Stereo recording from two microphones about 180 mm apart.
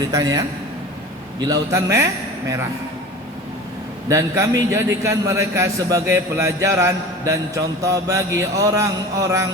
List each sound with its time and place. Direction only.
0.1 s a man's voice: 20° right (ahead or behind)
4.1 s a man's voice: 20° right (ahead or behind)